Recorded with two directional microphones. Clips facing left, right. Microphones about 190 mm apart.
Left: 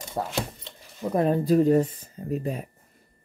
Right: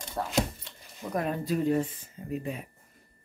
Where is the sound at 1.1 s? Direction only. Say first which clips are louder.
Left 8 dB; 35° left (ahead or behind).